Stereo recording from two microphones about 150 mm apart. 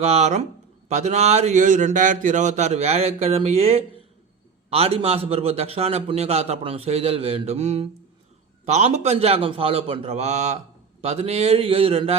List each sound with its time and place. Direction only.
0.0 s a man's voice: 45° right (ahead or behind)